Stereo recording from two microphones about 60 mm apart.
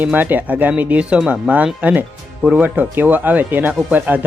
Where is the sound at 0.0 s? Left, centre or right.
Right.